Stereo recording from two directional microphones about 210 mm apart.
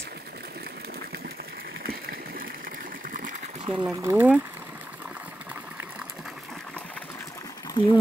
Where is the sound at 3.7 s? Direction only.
5° right (ahead or behind).